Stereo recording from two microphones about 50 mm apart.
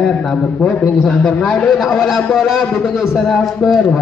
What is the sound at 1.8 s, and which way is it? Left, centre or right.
A man's voice, centre.